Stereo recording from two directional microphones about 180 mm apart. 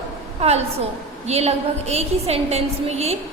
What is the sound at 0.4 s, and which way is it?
A woman's voice, 35° right (ahead or behind).